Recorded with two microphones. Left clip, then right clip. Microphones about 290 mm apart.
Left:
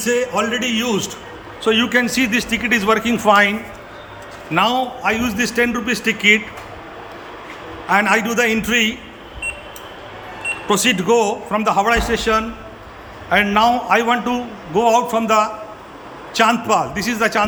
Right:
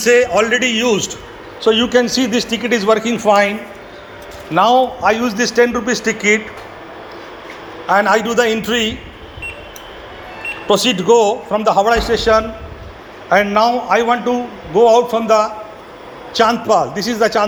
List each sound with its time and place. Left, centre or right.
0.0 s a man's voice: centre
4.6 s a man's voice: left
7.9 s speech: centre
10.7 s speech: centre